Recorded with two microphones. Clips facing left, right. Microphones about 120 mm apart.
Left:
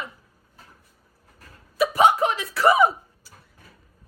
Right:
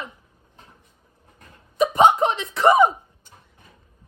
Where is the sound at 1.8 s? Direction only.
25° right (ahead or behind).